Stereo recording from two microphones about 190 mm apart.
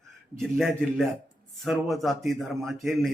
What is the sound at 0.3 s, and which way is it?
Speech, centre (ahead or behind).